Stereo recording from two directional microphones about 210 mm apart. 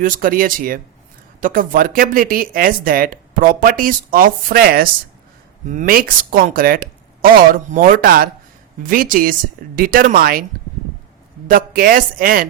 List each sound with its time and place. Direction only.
0.0 s speech: 40° right (ahead or behind)
11.4 s speech: 45° right (ahead or behind)